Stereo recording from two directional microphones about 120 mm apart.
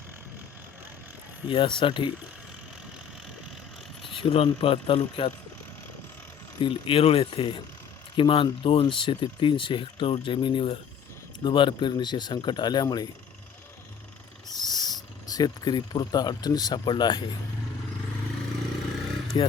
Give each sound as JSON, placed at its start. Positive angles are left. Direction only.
{"t": 1.5, "sound": "speech", "side_deg": 45}
{"t": 4.1, "sound": "speech", "side_deg": 50}
{"t": 6.6, "sound": "speech", "side_deg": 45}
{"t": 14.4, "sound": "mechanisms", "side_deg": 35}
{"t": 19.3, "sound": "speech", "side_deg": 40}